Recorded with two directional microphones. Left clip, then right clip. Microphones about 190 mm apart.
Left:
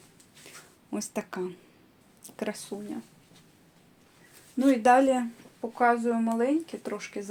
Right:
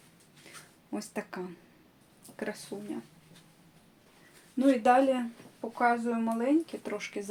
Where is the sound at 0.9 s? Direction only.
40° left (ahead or behind).